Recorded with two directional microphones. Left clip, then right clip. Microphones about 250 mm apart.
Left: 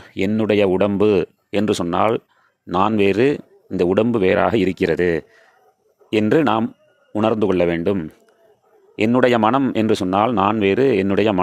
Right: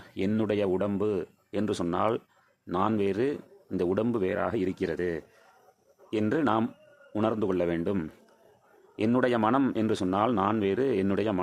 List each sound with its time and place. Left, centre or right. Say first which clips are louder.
0.0 s a man's voice: left 9 dB; left